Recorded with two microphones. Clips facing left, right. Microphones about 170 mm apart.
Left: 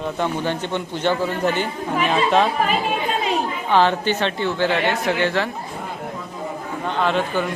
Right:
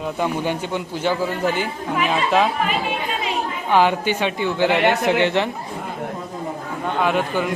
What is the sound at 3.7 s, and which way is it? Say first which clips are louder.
A man's voice: even; 10° right (ahead or behind).